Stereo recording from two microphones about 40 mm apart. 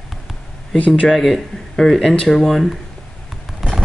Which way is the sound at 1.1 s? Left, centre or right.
Centre.